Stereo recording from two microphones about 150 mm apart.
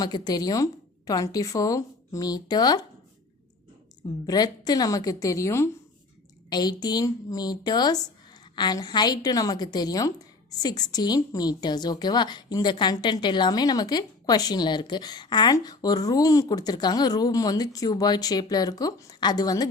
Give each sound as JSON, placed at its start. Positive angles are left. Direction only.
{"t": 0.0, "sound": "a woman's voice", "side_deg": 25}
{"t": 4.3, "sound": "a woman's voice", "side_deg": 25}